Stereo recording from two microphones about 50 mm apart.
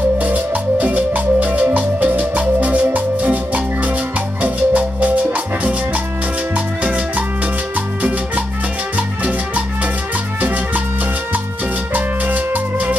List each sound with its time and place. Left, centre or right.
0.2 s music: right
11.9 s music: right